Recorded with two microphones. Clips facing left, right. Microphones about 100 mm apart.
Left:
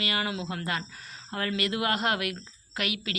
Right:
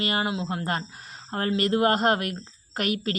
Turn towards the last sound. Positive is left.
turn(degrees=-40)  # may be behind; listen again after turning